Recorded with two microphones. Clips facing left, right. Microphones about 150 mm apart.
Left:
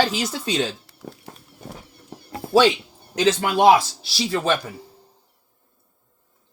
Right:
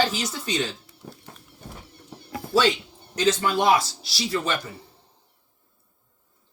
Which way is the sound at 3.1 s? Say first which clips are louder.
Left 2 dB; 80° left.